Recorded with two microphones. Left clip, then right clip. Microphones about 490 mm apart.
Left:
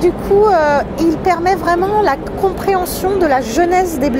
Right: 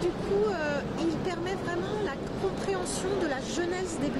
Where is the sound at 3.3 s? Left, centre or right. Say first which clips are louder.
Left 19 dB; left.